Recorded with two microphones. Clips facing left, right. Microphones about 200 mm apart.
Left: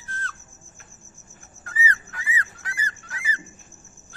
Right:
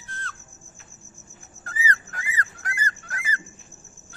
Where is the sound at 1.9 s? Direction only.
40° right (ahead or behind).